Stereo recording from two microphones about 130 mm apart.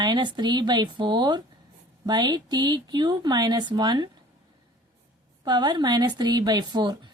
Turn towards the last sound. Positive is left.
turn(degrees=-35)  # may be behind; listen again after turning